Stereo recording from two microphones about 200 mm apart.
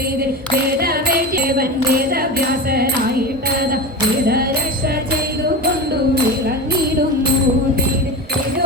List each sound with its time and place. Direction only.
0.8 s music: 50° right (ahead or behind)